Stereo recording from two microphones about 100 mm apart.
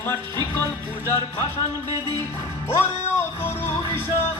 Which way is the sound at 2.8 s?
25° left (ahead or behind).